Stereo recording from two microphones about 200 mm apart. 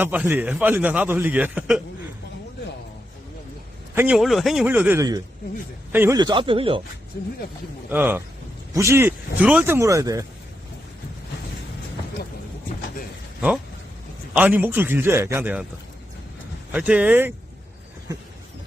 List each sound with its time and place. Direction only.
0.0 s a man's voice: 10° right (ahead or behind)
3.9 s a man's voice: 5° right (ahead or behind)
6.1 s speech: 20° right (ahead or behind)
7.9 s a man's voice: 10° right (ahead or behind)
14.3 s a man's voice: 10° right (ahead or behind)
16.7 s a man's voice: 5° right (ahead or behind)